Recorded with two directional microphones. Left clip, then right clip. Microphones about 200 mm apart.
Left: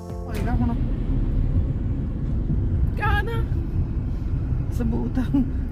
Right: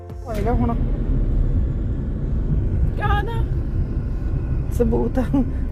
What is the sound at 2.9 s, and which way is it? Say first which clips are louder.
Vehicle: right 1 dB; 35° left (ahead or behind).